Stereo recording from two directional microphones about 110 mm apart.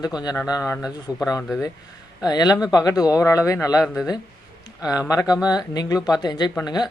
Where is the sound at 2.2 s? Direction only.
40° left (ahead or behind).